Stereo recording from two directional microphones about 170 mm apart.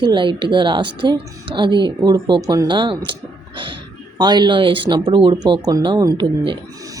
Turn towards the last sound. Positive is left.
turn(degrees=-25)  # may be behind; listen again after turning